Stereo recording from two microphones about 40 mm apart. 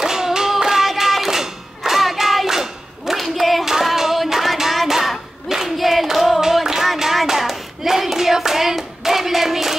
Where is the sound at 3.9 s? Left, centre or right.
Centre.